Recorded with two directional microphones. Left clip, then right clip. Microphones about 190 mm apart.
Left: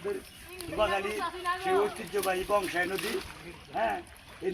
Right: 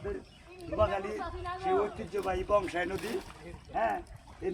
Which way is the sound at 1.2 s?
55° right (ahead or behind).